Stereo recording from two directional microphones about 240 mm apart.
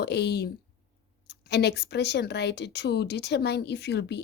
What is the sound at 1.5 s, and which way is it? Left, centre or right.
Speech, left.